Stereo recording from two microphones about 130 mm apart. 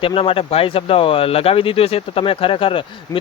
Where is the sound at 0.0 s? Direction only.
45° left (ahead or behind).